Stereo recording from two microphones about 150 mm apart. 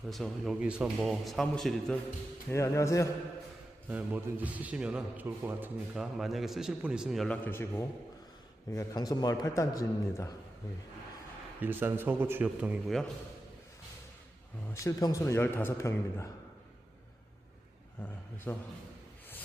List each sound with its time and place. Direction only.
0.1 s a man's voice: centre (ahead or behind)
2.5 s a man's voice: 20° left (ahead or behind)
3.8 s a man's voice: 10° right (ahead or behind)
7.4 s a man's voice: 15° left (ahead or behind)
11.6 s a man's voice: 15° right (ahead or behind)
14.7 s a man's voice: 20° left (ahead or behind)
18.5 s a man's voice: 15° left (ahead or behind)